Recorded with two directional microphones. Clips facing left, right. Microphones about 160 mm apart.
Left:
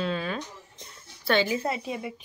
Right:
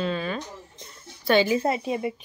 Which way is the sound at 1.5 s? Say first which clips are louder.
Right 5 dB; 25° right (ahead or behind).